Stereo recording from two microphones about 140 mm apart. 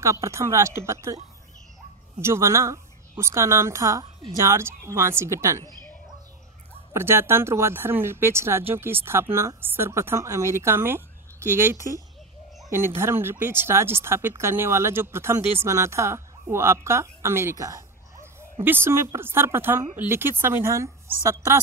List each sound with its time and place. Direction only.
0.0 s a woman's voice: 20° right (ahead or behind)
2.2 s a woman's voice: 20° right (ahead or behind)
6.9 s speech: 20° right (ahead or behind)